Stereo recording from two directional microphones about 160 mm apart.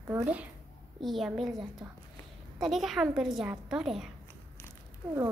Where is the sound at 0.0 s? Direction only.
15° right (ahead or behind).